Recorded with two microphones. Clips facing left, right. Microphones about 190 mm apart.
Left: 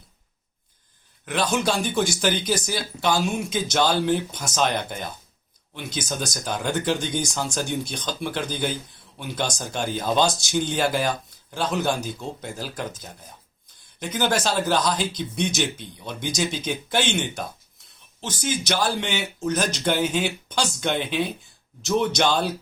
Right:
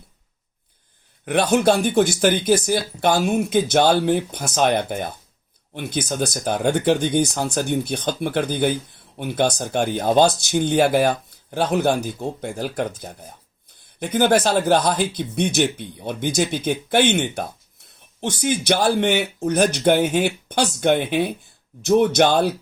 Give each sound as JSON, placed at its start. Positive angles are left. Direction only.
{"t": 1.2, "sound": "speech", "side_deg": -60}